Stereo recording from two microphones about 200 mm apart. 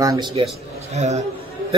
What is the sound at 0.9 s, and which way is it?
Speech, 35° right (ahead or behind).